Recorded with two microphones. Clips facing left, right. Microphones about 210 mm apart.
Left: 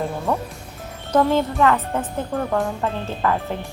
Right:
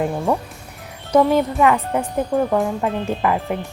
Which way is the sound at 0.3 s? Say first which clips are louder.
Right 3 dB; 10° right (ahead or behind).